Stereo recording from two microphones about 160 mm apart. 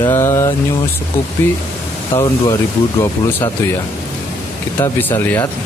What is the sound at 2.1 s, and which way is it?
Speech, 15° left (ahead or behind).